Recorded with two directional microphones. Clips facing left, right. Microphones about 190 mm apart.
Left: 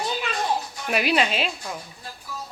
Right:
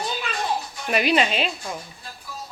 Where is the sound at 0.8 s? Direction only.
5° left (ahead or behind).